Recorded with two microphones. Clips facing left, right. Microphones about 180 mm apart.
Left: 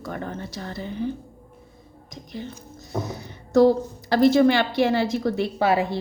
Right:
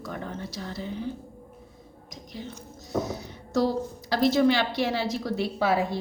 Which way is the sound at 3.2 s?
55° left (ahead or behind).